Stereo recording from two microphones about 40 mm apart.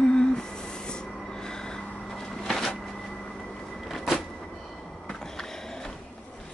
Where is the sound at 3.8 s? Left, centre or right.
Centre.